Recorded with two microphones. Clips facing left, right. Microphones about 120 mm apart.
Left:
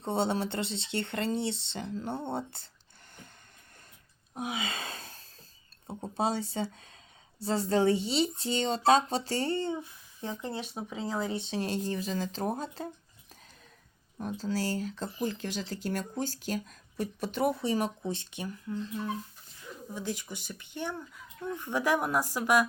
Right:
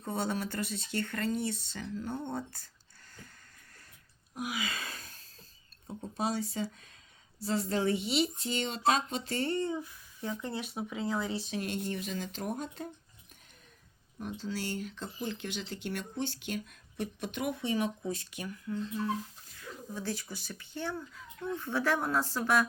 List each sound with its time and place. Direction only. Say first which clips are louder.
0.0 s speech: left 4 dB; 25° left (ahead or behind)
4.4 s gasp: left 2 dB; 25° left (ahead or behind)
5.9 s speech: left 3 dB; 30° left (ahead or behind)
14.2 s speech: left 5 dB; 40° left (ahead or behind)
19.5 s speech: left 1 dB; 20° left (ahead or behind)